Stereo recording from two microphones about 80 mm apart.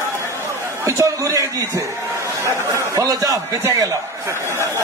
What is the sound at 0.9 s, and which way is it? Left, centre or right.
A man's voice, right.